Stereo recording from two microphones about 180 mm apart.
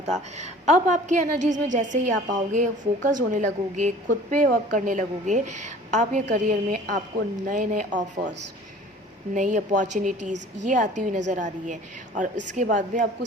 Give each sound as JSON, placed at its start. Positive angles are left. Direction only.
{"t": 0.3, "sound": "a woman's voice", "side_deg": -40}
{"t": 9.3, "sound": "a woman's voice", "side_deg": -45}